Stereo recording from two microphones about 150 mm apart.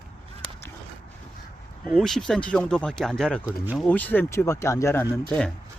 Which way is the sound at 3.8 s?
10° left (ahead or behind).